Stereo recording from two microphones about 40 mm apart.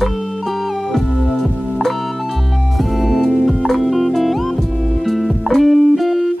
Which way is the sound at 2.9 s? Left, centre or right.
Centre.